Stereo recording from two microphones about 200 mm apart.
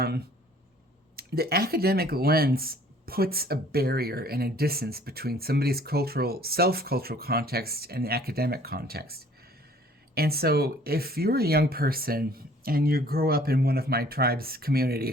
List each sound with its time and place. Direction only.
1.1 s speech: 50° right (ahead or behind)